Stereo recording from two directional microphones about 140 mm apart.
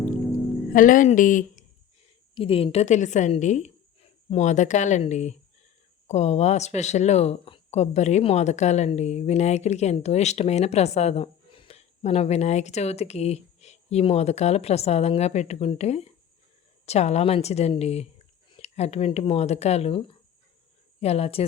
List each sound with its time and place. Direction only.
0.7 s speech: 70° left (ahead or behind)
2.3 s a woman's voice: 40° left (ahead or behind)